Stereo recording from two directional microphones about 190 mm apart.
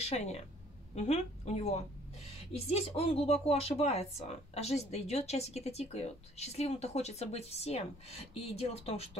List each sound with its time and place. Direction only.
0.0 s a woman's voice: 35° left (ahead or behind)